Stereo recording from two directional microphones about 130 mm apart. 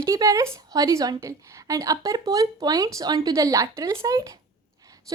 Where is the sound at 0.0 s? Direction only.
25° right (ahead or behind).